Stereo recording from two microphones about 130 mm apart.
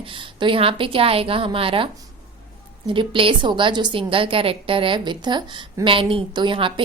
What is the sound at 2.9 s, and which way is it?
A woman's voice, 40° right (ahead or behind).